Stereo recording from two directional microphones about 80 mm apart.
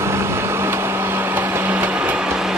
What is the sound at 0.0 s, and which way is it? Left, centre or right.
Vehicle, right.